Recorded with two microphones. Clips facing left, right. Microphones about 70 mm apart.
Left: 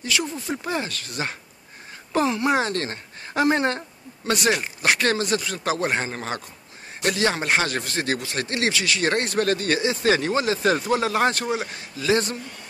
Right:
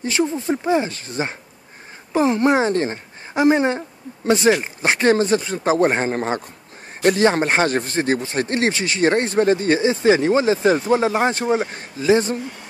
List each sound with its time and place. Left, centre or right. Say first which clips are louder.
0.0 s a man's voice: right 6 dB; right
2.3 s a man's voice: right 5 dB; right